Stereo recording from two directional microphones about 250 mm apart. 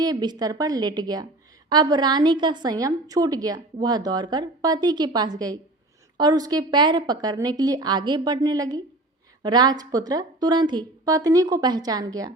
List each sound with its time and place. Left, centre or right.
0.0 s a woman's voice: centre